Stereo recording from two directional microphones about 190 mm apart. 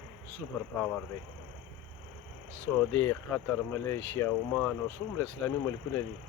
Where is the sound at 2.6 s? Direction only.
10° left (ahead or behind).